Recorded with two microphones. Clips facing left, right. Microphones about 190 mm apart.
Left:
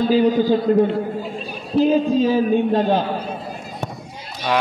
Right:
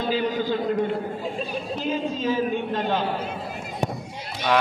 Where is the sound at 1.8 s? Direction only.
40° left (ahead or behind).